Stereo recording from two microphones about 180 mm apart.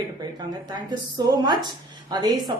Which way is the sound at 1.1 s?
25° right (ahead or behind).